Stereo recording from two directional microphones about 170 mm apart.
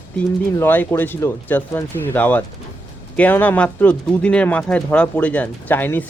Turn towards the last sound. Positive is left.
turn(degrees=10)  # may be behind; listen again after turning